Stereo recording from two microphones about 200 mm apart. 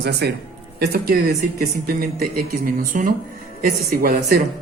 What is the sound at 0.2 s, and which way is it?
Speech, 55° right (ahead or behind).